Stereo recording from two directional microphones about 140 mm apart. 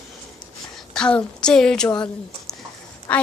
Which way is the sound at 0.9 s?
5° left (ahead or behind).